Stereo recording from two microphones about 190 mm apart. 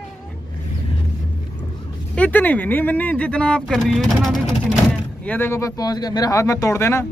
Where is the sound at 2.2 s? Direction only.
10° left (ahead or behind).